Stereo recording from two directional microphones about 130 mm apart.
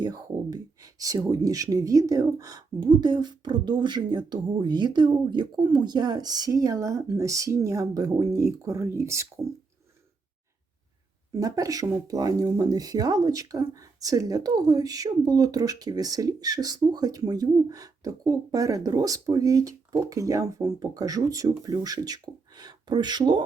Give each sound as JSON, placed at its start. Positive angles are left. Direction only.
{"t": 0.0, "sound": "speech", "side_deg": -30}
{"t": 11.3, "sound": "speech", "side_deg": -30}